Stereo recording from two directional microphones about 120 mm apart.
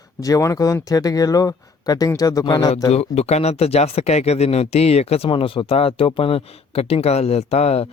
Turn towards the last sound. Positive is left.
turn(degrees=60)  # may be behind; listen again after turning